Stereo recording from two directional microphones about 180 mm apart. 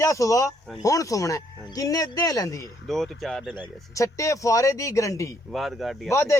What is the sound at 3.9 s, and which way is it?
Speech, 15° left (ahead or behind).